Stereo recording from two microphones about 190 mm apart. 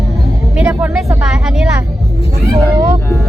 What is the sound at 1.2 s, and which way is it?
Vehicle, 5° right (ahead or behind).